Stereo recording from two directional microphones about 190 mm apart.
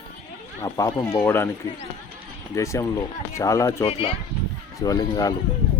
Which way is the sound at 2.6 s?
15° left (ahead or behind).